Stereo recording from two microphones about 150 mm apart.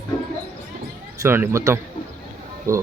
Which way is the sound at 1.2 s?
15° right (ahead or behind).